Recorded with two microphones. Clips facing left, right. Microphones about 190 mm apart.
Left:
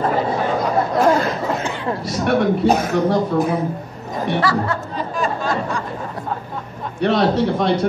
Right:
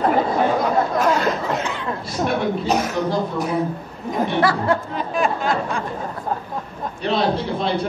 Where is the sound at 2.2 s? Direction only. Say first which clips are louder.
Left 5 dB; 65° left (ahead or behind).